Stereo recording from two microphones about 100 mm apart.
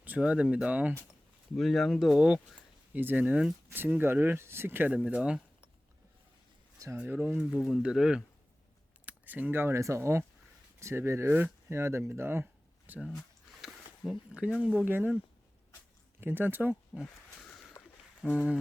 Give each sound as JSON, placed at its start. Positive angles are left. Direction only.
{"t": 0.0, "sound": "speech", "side_deg": -15}
{"t": 1.5, "sound": "speech", "side_deg": 0}
{"t": 2.9, "sound": "speech", "side_deg": -20}
{"t": 4.9, "sound": "speech", "side_deg": -10}
{"t": 6.9, "sound": "speech", "side_deg": -10}
{"t": 9.0, "sound": "speech", "side_deg": -15}
{"t": 13.1, "sound": "a sound", "side_deg": 0}
{"t": 14.8, "sound": "speech", "side_deg": -20}
{"t": 16.2, "sound": "speech", "side_deg": -20}
{"t": 17.0, "sound": "a sound", "side_deg": 5}
{"t": 18.2, "sound": "speech", "side_deg": -5}